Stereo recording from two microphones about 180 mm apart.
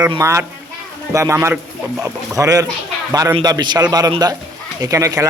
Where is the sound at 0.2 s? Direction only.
15° right (ahead or behind).